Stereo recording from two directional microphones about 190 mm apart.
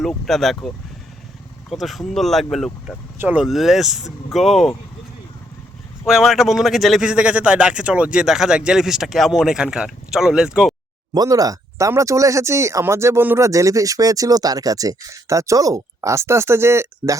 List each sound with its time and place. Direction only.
0.0 s speech: centre (ahead or behind)
1.7 s speech: centre (ahead or behind)
6.1 s speech: centre (ahead or behind)
11.1 s speech: 20° right (ahead or behind)